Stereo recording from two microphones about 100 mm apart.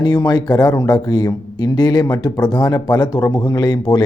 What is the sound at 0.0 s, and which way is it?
A man's voice, 40° left (ahead or behind).